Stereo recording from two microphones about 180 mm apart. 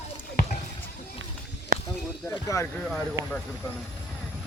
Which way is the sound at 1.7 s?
55° right (ahead or behind).